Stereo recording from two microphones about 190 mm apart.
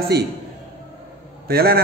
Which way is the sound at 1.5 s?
55° right (ahead or behind).